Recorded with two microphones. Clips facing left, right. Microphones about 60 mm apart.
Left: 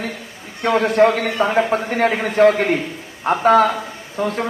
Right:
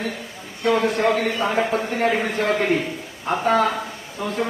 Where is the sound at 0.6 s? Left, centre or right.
Left.